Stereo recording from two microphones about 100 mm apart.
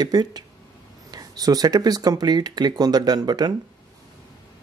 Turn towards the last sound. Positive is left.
turn(degrees=-45)  # may be behind; listen again after turning